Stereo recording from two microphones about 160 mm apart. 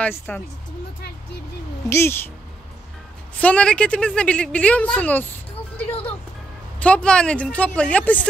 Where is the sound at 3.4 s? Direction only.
5° left (ahead or behind).